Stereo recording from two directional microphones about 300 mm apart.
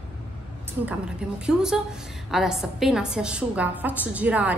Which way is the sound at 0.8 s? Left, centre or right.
Centre.